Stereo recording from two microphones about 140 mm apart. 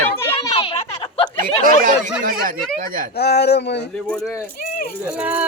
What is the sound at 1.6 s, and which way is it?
Speech, 80° right.